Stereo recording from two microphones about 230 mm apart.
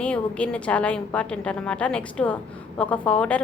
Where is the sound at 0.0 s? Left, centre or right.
Centre.